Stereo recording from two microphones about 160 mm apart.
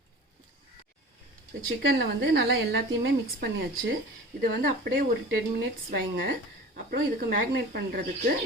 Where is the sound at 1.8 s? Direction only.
90° right.